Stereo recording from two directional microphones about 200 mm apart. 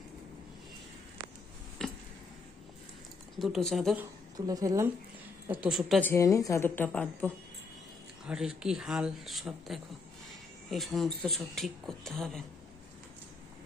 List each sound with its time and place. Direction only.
1.8 s a sound: 5° left (ahead or behind)
3.3 s speech: centre (ahead or behind)
4.4 s a woman's voice: 20° right (ahead or behind)
5.5 s speech: 5° right (ahead or behind)
6.1 s speech: 15° left (ahead or behind)
8.3 s speech: 5° right (ahead or behind)